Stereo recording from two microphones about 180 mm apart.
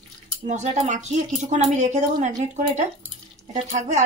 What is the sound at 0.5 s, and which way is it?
A woman's voice, 45° right (ahead or behind).